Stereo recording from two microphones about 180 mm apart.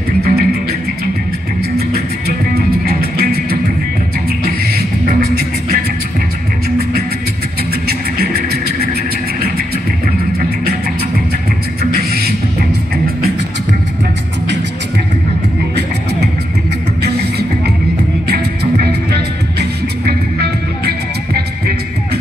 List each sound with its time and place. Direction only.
0.2 s music: 60° right (ahead or behind)
1.8 s music: 60° right (ahead or behind)
6.8 s music: 60° right (ahead or behind)
8.2 s music: 60° right (ahead or behind)
11.9 s music: 60° right (ahead or behind)
17.0 s music: 65° right (ahead or behind)